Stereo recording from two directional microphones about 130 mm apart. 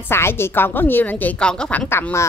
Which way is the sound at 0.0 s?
20° left (ahead or behind).